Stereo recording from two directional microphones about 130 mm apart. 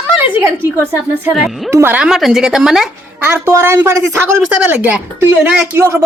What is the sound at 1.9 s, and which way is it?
A woman's voice, 5° right (ahead or behind).